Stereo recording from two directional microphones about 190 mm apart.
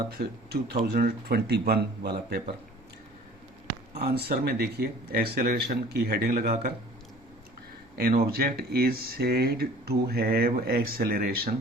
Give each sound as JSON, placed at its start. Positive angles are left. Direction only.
{"t": 0.2, "sound": "speech", "side_deg": -55}
{"t": 3.9, "sound": "speech", "side_deg": -55}
{"t": 7.9, "sound": "speech", "side_deg": -50}